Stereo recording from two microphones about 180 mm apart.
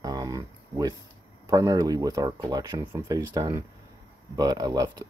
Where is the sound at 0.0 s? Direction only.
20° right (ahead or behind).